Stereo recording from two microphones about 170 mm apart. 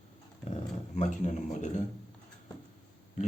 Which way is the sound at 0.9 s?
45° left (ahead or behind).